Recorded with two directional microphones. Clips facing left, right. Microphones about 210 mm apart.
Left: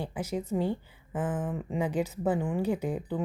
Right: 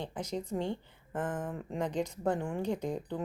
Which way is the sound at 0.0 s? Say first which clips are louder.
Left 4 dB; 5° left (ahead or behind).